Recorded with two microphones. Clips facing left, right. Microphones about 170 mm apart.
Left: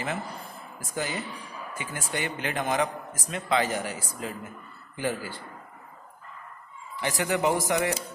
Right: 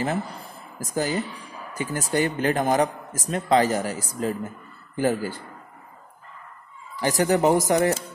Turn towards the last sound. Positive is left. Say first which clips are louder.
# right 6 dB
turn(degrees=-40)  # may be behind; listen again after turning